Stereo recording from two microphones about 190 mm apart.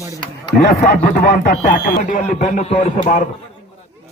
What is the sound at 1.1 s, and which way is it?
Speech, 55° left (ahead or behind).